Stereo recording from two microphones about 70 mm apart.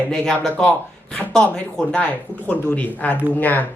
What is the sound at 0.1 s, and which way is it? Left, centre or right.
A woman's voice, centre.